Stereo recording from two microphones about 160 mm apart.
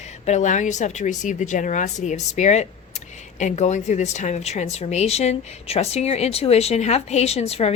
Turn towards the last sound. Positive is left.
turn(degrees=40)  # may be behind; listen again after turning